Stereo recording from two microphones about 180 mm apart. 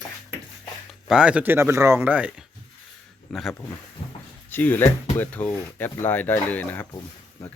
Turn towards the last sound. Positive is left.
turn(degrees=10)  # may be behind; listen again after turning